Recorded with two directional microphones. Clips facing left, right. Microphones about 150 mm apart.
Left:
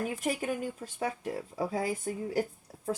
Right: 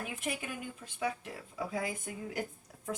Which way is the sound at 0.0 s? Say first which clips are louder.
Left 7 dB; 40° left (ahead or behind).